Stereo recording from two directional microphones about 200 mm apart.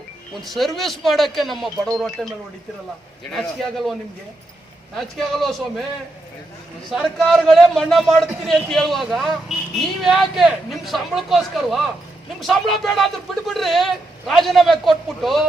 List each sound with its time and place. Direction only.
0.3 s speech: centre (ahead or behind)
3.3 s speech: centre (ahead or behind)
4.9 s speech: centre (ahead or behind)
6.9 s speech: centre (ahead or behind)